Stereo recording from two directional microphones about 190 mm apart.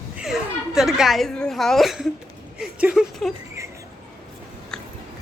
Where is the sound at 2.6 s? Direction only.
5° right (ahead or behind).